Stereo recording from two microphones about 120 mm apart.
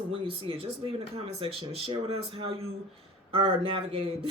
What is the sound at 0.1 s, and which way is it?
Speech, 50° right (ahead or behind).